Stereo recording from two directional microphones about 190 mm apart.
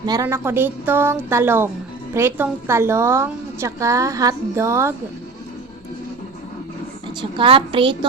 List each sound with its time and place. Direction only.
0.0 s a woman's voice: 20° right (ahead or behind)
7.2 s a woman's voice: 25° right (ahead or behind)